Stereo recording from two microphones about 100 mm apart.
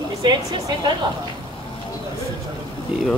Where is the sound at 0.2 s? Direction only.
50° right (ahead or behind).